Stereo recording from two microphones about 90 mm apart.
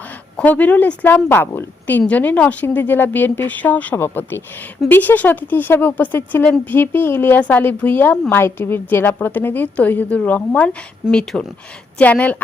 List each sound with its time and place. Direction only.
0.4 s a woman's voice: 15° left (ahead or behind)